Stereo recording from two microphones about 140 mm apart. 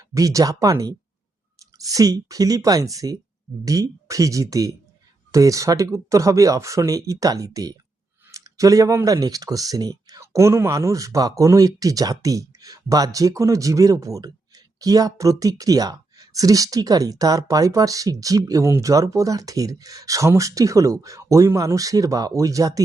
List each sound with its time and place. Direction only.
0.1 s speech: 25° right (ahead or behind)